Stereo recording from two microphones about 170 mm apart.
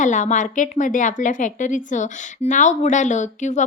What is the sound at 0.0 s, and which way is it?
A woman's voice, 45° left (ahead or behind).